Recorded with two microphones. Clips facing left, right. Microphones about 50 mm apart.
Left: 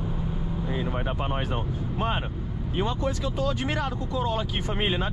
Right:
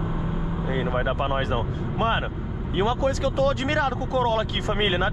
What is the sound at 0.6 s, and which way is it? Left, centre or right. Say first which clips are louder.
Vehicle: right 5 dB; right.